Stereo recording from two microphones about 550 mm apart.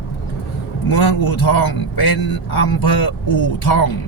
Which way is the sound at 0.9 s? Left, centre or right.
Left.